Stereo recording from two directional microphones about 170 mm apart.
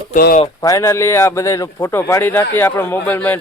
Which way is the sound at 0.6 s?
20° left (ahead or behind).